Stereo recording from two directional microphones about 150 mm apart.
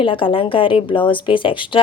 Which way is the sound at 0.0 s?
35° left (ahead or behind).